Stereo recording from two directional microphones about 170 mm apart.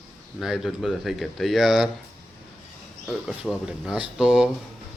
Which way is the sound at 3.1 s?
5° right (ahead or behind).